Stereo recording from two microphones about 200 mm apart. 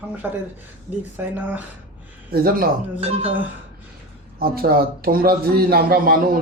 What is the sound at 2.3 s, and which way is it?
Speech, 50° right (ahead or behind).